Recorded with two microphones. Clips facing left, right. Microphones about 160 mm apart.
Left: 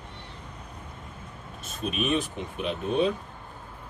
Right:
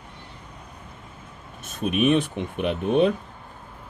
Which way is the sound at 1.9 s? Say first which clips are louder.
Right 7 dB; 60° right (ahead or behind).